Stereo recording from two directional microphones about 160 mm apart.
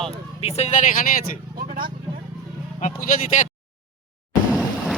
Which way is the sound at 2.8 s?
55° left (ahead or behind).